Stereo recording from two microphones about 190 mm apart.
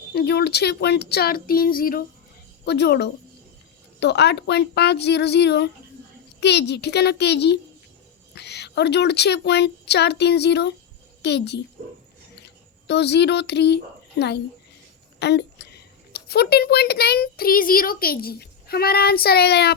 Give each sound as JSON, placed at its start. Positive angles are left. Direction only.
{"t": 0.1, "sound": "speech", "side_deg": 55}
{"t": 2.6, "sound": "a child's voice", "side_deg": 60}
{"t": 12.9, "sound": "speech", "side_deg": 60}
{"t": 15.2, "sound": "a woman's voice", "side_deg": 60}